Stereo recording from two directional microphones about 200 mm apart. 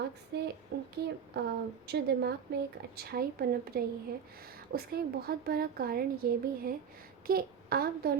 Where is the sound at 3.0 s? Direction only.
50° right (ahead or behind).